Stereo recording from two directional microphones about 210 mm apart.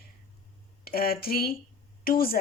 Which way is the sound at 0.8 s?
45° left (ahead or behind).